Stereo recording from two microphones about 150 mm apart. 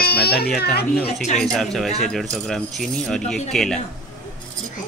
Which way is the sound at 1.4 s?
Centre (ahead or behind).